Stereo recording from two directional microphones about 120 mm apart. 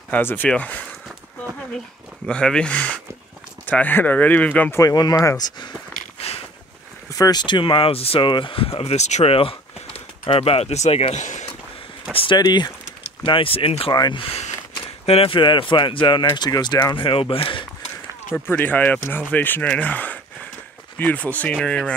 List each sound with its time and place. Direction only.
0.1 s speech: 15° left (ahead or behind)
2.2 s speech: 5° left (ahead or behind)
4.7 s speech: 30° left (ahead or behind)
7.1 s speech: 30° left (ahead or behind); by 11.4 s 80° left
12.1 s speech: 50° left (ahead or behind)
12.4 s speech: 35° left (ahead or behind)
13.9 s speech: 35° left (ahead or behind)
15.0 s speech: 50° left (ahead or behind)
18.3 s speech: 15° left (ahead or behind)